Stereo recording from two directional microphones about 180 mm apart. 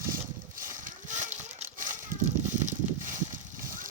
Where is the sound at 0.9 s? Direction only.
45° right (ahead or behind).